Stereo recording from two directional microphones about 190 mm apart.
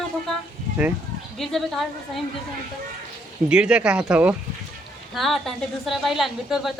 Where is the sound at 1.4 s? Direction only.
Centre (ahead or behind).